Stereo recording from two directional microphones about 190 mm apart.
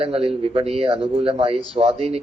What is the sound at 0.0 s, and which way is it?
Speech, 30° right (ahead or behind).